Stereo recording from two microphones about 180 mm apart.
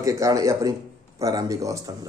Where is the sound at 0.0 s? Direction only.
20° right (ahead or behind).